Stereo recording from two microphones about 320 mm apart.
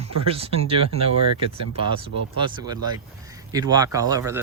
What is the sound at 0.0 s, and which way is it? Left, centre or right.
Speech, centre.